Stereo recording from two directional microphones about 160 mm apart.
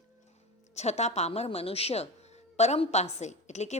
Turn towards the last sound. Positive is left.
turn(degrees=45)  # may be behind; listen again after turning